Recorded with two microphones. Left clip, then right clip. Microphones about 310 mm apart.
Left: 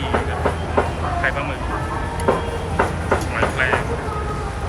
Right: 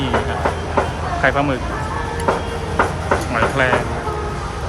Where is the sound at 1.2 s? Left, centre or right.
Centre.